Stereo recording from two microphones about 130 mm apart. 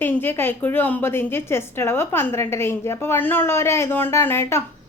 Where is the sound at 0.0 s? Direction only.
15° left (ahead or behind).